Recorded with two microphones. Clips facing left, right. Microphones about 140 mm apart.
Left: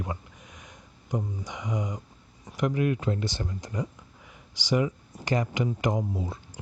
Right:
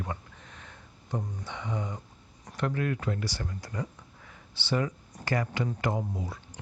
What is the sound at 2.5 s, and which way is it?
Speech, 15° left (ahead or behind).